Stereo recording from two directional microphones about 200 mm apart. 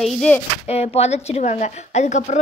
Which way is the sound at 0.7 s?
30° left (ahead or behind).